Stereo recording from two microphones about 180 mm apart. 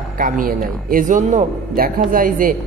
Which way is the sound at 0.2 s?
50° right (ahead or behind).